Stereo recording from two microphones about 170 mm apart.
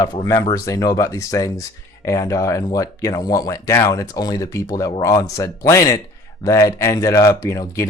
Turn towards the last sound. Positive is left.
turn(degrees=20)  # may be behind; listen again after turning